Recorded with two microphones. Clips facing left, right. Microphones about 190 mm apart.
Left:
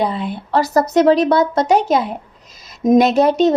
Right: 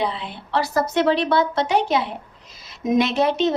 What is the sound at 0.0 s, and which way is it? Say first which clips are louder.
A woman's voice: left 6 dB; 45° left (ahead or behind).